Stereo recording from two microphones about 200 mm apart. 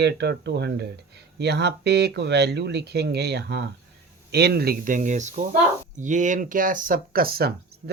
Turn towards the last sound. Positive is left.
turn(degrees=-50)  # may be behind; listen again after turning